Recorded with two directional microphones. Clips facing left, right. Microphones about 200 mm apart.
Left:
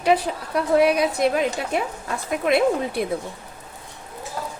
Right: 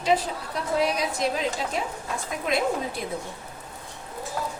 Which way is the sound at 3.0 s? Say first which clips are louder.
Left 8 dB; 60° left (ahead or behind).